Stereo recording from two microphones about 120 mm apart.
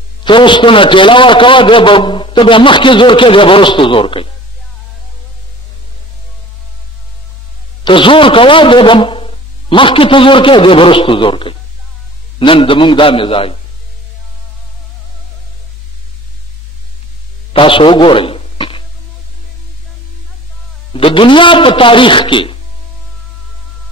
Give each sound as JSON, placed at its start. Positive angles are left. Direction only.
{"t": 0.2, "sound": "a man's voice", "side_deg": 45}
{"t": 7.8, "sound": "a man's voice", "side_deg": 45}
{"t": 17.5, "sound": "a sound", "side_deg": 45}
{"t": 20.9, "sound": "a man's voice", "side_deg": 45}